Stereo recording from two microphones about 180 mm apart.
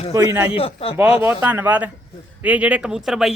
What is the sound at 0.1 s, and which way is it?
Speech, 15° right (ahead or behind).